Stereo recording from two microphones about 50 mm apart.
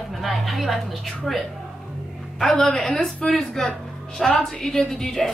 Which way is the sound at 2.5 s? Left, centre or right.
Centre.